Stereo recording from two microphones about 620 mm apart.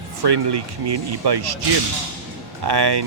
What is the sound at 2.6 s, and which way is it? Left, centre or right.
Speech, right.